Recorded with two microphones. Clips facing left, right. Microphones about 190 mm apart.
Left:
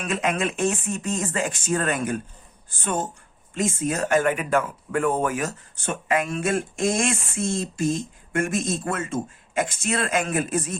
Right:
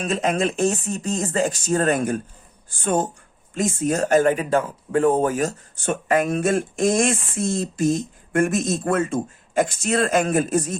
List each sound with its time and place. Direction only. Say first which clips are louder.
0.0 s speech: right 3 dB; 40° right (ahead or behind)
5.8 s speech: right 4 dB; 45° right (ahead or behind)